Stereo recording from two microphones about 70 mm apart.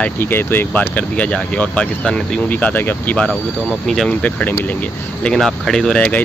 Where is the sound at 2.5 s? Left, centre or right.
Left.